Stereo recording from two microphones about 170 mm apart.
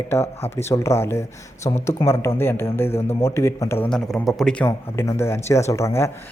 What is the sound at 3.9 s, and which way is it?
Speech, centre (ahead or behind).